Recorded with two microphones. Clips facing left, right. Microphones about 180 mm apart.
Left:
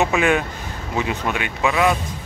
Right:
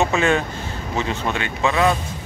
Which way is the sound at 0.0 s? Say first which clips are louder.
Even; 15° left (ahead or behind).